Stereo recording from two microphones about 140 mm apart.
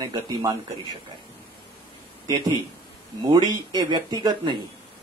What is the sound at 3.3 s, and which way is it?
Speech, 30° right (ahead or behind).